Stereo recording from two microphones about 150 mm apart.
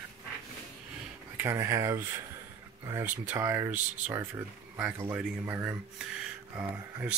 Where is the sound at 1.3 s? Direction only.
15° right (ahead or behind).